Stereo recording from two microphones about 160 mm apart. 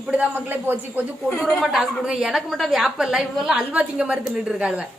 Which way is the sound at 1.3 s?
5° left (ahead or behind).